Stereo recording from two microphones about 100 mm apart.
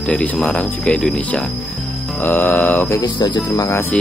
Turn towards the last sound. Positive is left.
turn(degrees=40)  # may be behind; listen again after turning